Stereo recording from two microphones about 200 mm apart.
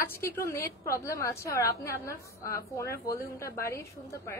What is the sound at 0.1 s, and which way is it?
A woman's voice, 10° left (ahead or behind).